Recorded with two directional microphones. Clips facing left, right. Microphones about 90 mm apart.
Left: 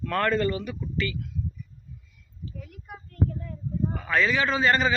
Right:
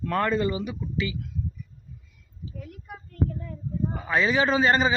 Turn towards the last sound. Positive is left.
turn(degrees=-20)  # may be behind; listen again after turning